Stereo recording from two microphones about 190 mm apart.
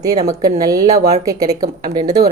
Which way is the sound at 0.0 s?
20° right (ahead or behind).